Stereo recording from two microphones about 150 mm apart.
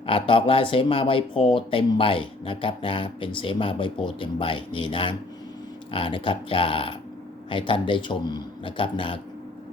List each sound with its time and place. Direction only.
0.0 s speech: 35° left (ahead or behind)